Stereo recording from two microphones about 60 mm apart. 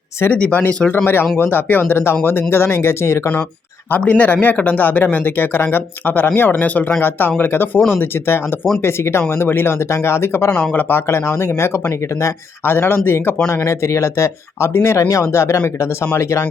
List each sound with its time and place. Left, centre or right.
0.3 s speech: centre
1.0 s speech: left
4.0 s speech: left
13.7 s speech: left